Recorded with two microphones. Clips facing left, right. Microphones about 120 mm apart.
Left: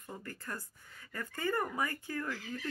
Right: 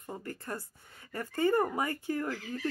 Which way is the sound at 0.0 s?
25° right (ahead or behind).